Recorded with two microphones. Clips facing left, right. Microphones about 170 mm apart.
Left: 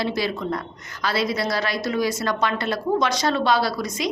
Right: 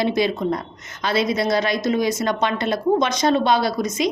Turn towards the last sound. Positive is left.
turn(degrees=-20)  # may be behind; listen again after turning